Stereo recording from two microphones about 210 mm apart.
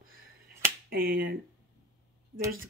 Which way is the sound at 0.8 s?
45° right (ahead or behind).